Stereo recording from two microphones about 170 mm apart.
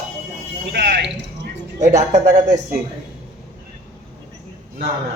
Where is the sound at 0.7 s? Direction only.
70° right (ahead or behind).